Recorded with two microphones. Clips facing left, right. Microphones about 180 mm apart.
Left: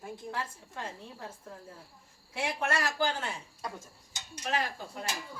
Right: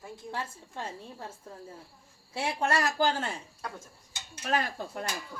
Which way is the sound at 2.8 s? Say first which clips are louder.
Right 4 dB; 40° right (ahead or behind).